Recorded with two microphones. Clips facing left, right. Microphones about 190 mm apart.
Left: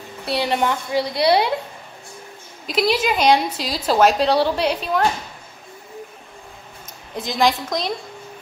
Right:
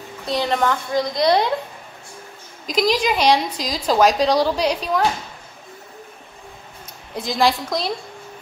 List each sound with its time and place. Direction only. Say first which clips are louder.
0.2 s a woman's voice: even; 10° left (ahead or behind)
2.7 s a woman's voice: even; 5° left (ahead or behind)
7.2 s a woman's voice: even; centre (ahead or behind)